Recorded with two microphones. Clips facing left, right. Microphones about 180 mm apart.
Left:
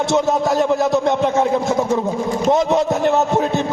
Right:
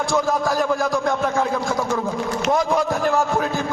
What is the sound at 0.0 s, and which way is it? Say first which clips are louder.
A woman's voice: left 4 dB; 25° left (ahead or behind).